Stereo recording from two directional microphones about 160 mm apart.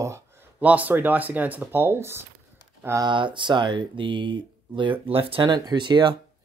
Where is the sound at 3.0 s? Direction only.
30° right (ahead or behind).